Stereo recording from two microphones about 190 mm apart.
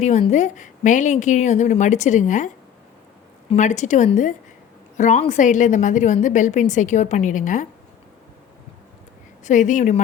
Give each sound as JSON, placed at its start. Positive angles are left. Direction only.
{"t": 0.0, "sound": "a woman's voice", "side_deg": 35}
{"t": 3.5, "sound": "a woman's voice", "side_deg": 40}
{"t": 9.4, "sound": "a woman's voice", "side_deg": 40}